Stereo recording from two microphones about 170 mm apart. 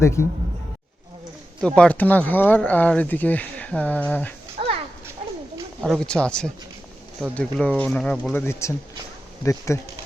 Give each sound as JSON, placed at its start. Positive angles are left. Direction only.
{"t": 0.0, "sound": "speech", "side_deg": 15}
{"t": 1.6, "sound": "speech", "side_deg": 5}
{"t": 5.8, "sound": "speech", "side_deg": 0}